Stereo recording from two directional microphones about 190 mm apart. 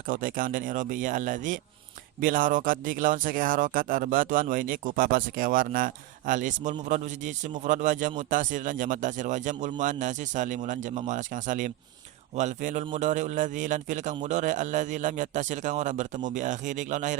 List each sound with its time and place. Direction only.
0.1 s a man's voice: 45° right (ahead or behind)